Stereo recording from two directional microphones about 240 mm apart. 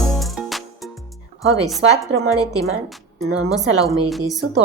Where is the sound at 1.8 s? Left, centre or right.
Right.